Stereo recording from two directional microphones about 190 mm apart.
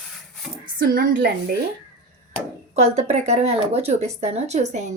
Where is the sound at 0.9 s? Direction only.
45° right (ahead or behind).